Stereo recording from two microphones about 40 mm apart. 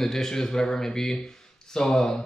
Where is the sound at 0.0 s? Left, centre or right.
Centre.